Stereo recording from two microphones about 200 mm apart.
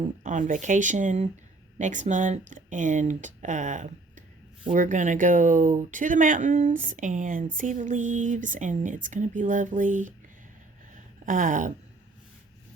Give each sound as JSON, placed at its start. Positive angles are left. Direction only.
{"t": 0.2, "sound": "speech", "side_deg": -40}
{"t": 11.3, "sound": "speech", "side_deg": -40}